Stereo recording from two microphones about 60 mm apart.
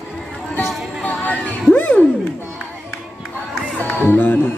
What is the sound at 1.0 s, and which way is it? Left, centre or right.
Chatter, left.